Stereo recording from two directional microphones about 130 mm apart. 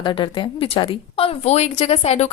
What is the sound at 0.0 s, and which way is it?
A woman's voice, 40° left (ahead or behind).